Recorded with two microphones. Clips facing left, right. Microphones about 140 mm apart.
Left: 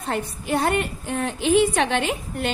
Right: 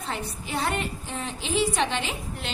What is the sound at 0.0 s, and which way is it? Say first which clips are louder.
A woman's voice: left 6 dB; 50° left (ahead or behind).